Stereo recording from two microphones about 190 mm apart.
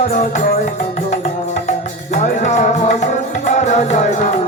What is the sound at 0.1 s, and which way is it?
Music, 40° left (ahead or behind).